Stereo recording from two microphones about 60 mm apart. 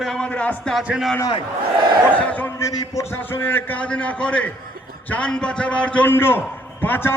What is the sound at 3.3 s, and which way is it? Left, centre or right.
A man's voice, left.